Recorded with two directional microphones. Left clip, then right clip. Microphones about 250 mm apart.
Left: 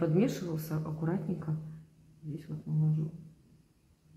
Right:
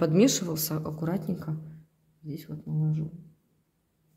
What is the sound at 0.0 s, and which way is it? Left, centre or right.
Speech, right.